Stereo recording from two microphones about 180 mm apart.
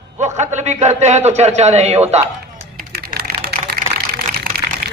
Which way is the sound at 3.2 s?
60° right (ahead or behind).